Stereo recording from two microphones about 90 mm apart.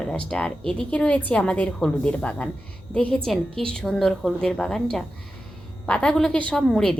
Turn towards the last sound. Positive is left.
turn(degrees=5)  # may be behind; listen again after turning